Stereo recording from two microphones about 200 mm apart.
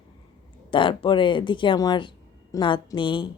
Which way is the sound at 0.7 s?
25° left (ahead or behind).